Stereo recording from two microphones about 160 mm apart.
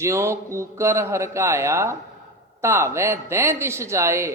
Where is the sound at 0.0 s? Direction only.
15° right (ahead or behind).